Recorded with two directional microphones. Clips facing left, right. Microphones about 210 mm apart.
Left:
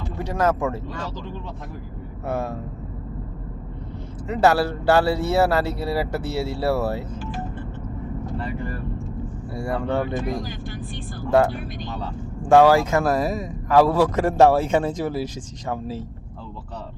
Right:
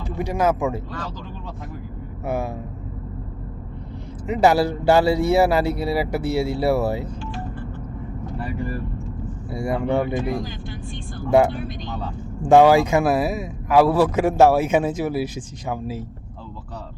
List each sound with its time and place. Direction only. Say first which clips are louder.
0.2 s speech: right 1 dB; 10° right (ahead or behind)
2.2 s speech: right 1 dB; 10° right (ahead or behind)
4.3 s speech: right 2 dB; 15° right (ahead or behind)
9.5 s speech: right 3 dB; 15° right (ahead or behind)
12.5 s speech: right 1 dB; 15° right (ahead or behind)